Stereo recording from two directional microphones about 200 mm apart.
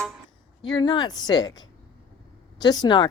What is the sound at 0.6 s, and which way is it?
Speech, 20° left (ahead or behind).